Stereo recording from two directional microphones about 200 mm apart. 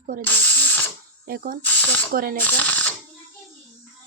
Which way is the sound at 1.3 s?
45° right (ahead or behind).